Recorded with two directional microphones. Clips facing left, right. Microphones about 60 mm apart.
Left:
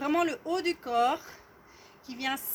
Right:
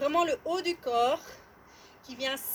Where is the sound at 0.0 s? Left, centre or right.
Left.